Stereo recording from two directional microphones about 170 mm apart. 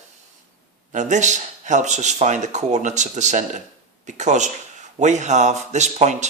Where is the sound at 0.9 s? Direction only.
45° right (ahead or behind).